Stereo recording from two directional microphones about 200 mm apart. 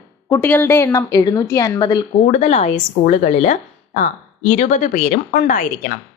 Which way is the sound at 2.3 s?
35° left (ahead or behind).